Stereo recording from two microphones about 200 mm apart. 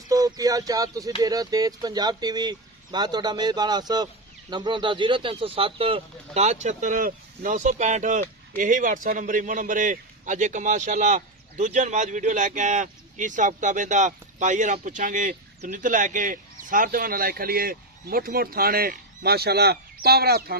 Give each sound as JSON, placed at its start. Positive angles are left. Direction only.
{"t": 0.1, "sound": "speech", "side_deg": -20}